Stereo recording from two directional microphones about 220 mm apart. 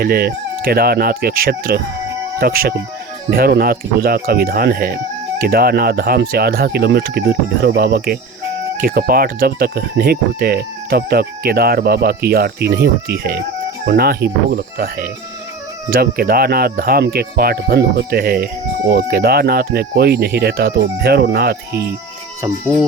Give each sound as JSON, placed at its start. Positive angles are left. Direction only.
{"t": 0.0, "sound": "speech", "side_deg": -45}